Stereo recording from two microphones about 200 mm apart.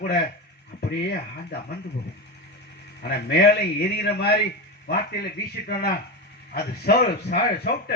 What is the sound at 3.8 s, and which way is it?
Speech, 55° left (ahead or behind).